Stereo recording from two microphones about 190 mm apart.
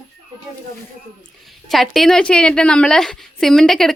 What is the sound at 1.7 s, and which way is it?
A woman's voice, centre (ahead or behind).